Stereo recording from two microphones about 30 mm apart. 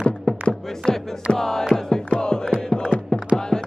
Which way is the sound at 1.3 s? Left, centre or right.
Centre.